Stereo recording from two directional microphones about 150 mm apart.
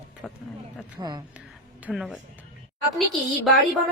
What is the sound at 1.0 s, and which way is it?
Speech, 25° right (ahead or behind).